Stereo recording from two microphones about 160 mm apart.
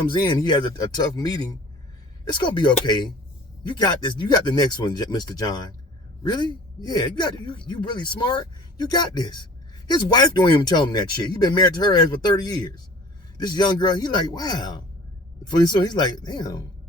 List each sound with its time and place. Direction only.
0.1 s a man's voice: 30° left (ahead or behind)